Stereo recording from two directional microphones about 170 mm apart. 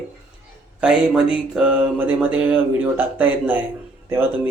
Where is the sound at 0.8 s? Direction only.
5° right (ahead or behind).